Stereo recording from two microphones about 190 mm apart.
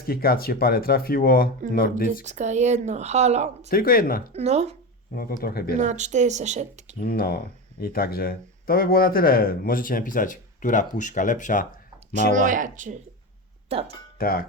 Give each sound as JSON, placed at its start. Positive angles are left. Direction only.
{"t": 0.0, "sound": "speech", "side_deg": 50}
{"t": 2.2, "sound": "speech", "side_deg": -40}
{"t": 3.7, "sound": "speech", "side_deg": 50}
{"t": 4.3, "sound": "speech", "side_deg": -35}
{"t": 5.1, "sound": "speech", "side_deg": 50}
{"t": 5.7, "sound": "speech", "side_deg": -40}
{"t": 7.0, "sound": "speech", "side_deg": 50}
{"t": 12.1, "sound": "speech", "side_deg": -40}
{"t": 13.7, "sound": "speech", "side_deg": -30}
{"t": 14.2, "sound": "speech", "side_deg": 50}